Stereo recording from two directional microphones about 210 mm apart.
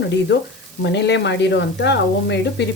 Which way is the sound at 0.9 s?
55° left (ahead or behind).